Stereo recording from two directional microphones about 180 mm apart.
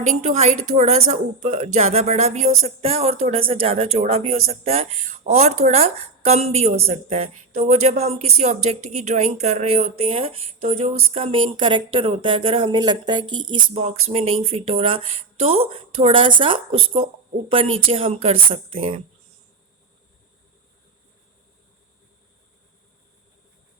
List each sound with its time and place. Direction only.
0.2 s speech: 40° right (ahead or behind)
13.7 s speech: 35° right (ahead or behind)